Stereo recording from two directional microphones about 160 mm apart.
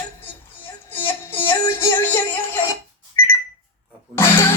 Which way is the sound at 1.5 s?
15° left (ahead or behind).